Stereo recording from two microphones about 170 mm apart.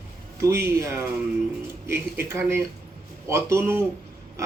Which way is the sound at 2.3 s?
15° right (ahead or behind).